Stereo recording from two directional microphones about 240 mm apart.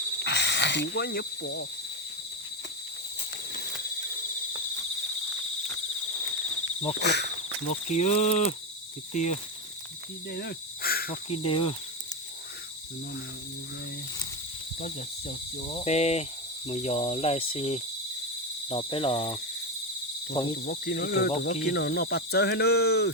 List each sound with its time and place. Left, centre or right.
0.2 s speech: left
7.0 s insect: left
7.7 s speech: left
10.3 s cricket: left
11.4 s speech: left
14.8 s speech: left
20.7 s speech: left